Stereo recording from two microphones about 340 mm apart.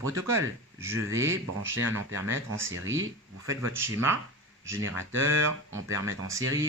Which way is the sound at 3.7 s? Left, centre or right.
Centre.